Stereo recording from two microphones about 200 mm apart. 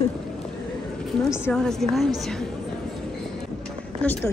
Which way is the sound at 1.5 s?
Centre (ahead or behind).